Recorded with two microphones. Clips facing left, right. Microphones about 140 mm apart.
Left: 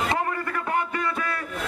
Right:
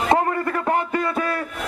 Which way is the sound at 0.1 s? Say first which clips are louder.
Right 7 dB; 40° right (ahead or behind).